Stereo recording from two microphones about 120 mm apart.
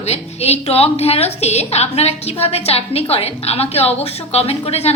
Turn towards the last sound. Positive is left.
turn(degrees=60)  # may be behind; listen again after turning